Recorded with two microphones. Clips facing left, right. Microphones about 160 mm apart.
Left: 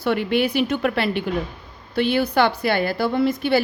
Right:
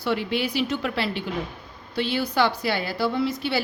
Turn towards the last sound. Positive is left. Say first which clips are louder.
# left 6 dB
turn(degrees=50)  # may be behind; listen again after turning